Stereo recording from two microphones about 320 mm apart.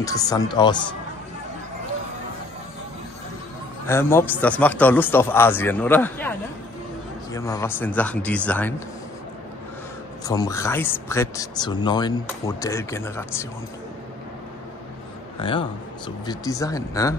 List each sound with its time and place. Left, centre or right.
0.0 s speech: centre
3.8 s speech: centre
7.3 s a man's voice: centre
10.2 s speech: centre
15.3 s speech: centre